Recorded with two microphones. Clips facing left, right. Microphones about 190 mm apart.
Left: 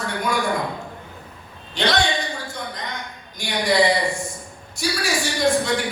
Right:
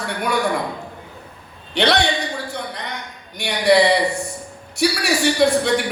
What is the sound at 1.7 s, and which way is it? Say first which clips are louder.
Speech: right 4 dB; 65° right (ahead or behind).